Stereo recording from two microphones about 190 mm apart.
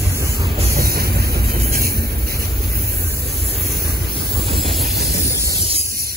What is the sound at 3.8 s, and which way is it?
Vehicle, 55° right (ahead or behind).